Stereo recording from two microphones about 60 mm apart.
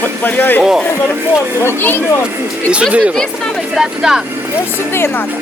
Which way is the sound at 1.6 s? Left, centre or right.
Left.